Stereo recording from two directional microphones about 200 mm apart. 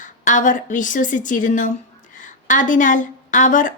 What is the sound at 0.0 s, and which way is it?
Speech, 40° left (ahead or behind).